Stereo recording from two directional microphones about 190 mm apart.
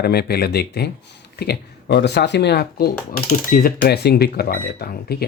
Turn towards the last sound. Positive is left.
turn(degrees=55)  # may be behind; listen again after turning